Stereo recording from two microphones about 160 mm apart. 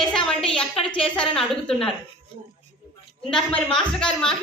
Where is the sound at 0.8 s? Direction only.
30° left (ahead or behind).